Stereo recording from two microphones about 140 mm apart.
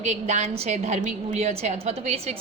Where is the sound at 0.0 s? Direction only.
55° right (ahead or behind).